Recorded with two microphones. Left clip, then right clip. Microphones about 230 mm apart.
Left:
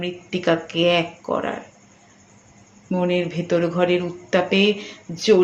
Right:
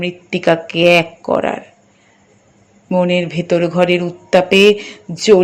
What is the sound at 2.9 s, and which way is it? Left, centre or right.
Speech, right.